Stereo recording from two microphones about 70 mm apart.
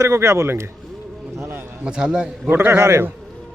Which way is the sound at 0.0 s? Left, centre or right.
Right.